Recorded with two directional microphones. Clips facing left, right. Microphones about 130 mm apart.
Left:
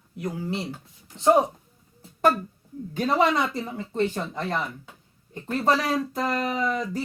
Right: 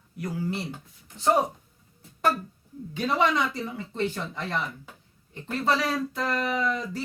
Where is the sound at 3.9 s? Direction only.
40° left (ahead or behind).